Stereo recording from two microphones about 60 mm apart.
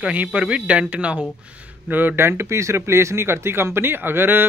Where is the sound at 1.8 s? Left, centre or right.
Right.